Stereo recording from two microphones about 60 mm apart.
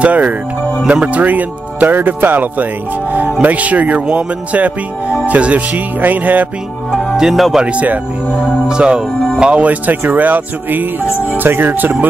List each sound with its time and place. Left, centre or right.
0.0 s speech: right
6.9 s speech: centre
7.6 s speech: right